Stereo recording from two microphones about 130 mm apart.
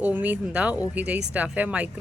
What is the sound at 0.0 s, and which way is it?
Speech, 15° right (ahead or behind).